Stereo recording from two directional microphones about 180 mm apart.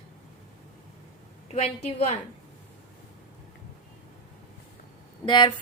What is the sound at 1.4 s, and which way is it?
Speech, 35° left (ahead or behind).